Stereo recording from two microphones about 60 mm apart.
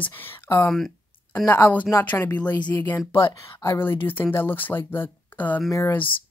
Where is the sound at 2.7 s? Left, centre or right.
Left.